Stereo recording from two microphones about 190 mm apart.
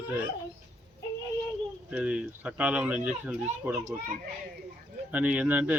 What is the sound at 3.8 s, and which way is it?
Speech, 40° right (ahead or behind).